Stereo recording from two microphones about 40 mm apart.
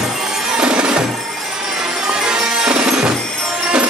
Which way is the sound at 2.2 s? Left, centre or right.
Centre.